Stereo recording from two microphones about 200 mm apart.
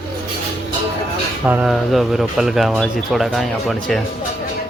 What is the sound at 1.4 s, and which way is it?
Speech, 5° right (ahead or behind).